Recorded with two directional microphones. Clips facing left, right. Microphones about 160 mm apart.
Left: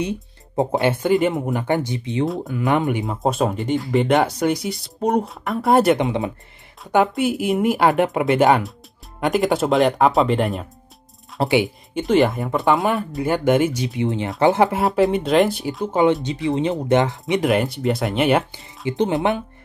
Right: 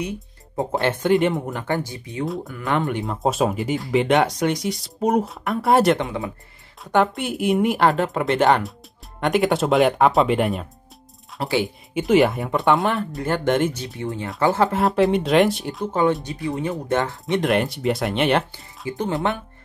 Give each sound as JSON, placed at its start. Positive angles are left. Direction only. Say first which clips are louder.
{"t": 0.7, "sound": "speech", "louder": "even", "side_deg": 5}
{"t": 1.5, "sound": "speech", "louder": "left 4 dB", "side_deg": 15}
{"t": 3.0, "sound": "speech", "louder": "left 1 dB", "side_deg": 0}
{"t": 5.9, "sound": "speech", "louder": "left 5 dB", "side_deg": 20}
{"t": 6.8, "sound": "speech", "louder": "left 2 dB", "side_deg": 5}
{"t": 7.9, "sound": "speech", "louder": "left 4 dB", "side_deg": 15}
{"t": 8.3, "sound": "speech", "louder": "even", "side_deg": 5}
{"t": 14.8, "sound": "speech", "louder": "even", "side_deg": 0}
{"t": 15.9, "sound": "speech", "louder": "left 3 dB", "side_deg": 20}
{"t": 17.3, "sound": "speech", "louder": "right 1 dB", "side_deg": 0}
{"t": 18.9, "sound": "speech", "louder": "left 4 dB", "side_deg": 20}